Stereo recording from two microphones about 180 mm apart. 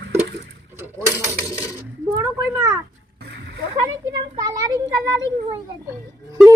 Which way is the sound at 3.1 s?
70° right (ahead or behind).